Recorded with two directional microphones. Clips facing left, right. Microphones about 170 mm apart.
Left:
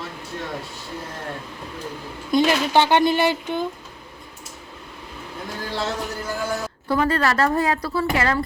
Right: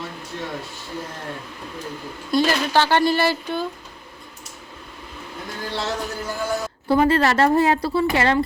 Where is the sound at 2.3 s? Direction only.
20° left (ahead or behind).